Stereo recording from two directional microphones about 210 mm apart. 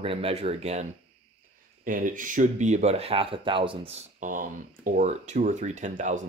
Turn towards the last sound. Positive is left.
turn(degrees=-35)  # may be behind; listen again after turning